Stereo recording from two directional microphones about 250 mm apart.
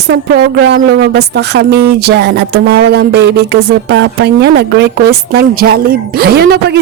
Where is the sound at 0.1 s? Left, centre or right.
Right.